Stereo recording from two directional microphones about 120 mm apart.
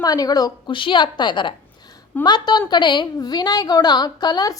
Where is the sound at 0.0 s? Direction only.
30° left (ahead or behind).